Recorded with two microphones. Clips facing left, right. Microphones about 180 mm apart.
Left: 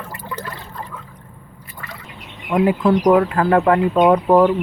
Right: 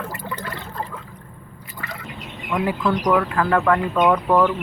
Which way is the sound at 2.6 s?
20° left (ahead or behind).